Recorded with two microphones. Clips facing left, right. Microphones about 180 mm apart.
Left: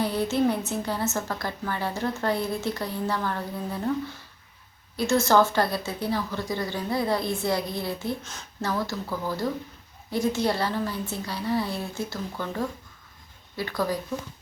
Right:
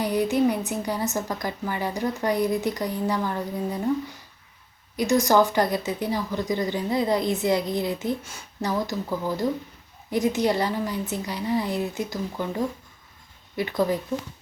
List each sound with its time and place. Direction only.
0.0 s speech: 15° right (ahead or behind)
4.9 s speech: 15° right (ahead or behind)